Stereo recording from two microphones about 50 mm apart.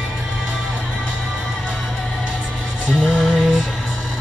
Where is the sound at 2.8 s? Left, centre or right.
Centre.